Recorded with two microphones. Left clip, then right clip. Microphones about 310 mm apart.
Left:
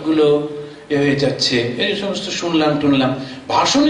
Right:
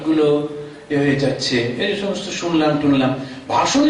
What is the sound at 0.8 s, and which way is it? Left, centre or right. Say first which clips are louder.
A man's voice: left 2 dB; centre.